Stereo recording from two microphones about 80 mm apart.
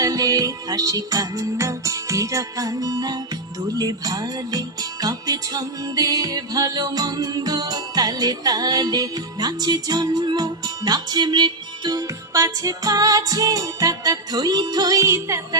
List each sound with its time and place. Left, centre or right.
0.0 s music: right